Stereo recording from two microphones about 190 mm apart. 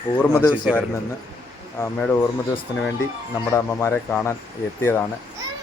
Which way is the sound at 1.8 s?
10° left (ahead or behind).